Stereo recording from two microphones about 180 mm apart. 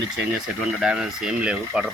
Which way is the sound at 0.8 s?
5° right (ahead or behind).